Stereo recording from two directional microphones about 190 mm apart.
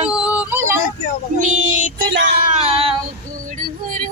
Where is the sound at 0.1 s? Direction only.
5° right (ahead or behind).